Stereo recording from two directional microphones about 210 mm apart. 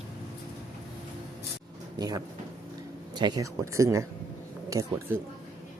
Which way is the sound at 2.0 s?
20° right (ahead or behind).